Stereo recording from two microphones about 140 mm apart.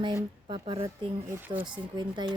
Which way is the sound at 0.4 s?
40° right (ahead or behind).